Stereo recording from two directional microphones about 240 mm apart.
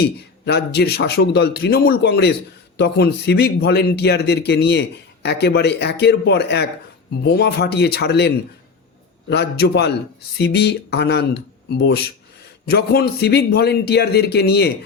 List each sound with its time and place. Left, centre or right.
0.0 s a man's voice: left
9.3 s a man's voice: left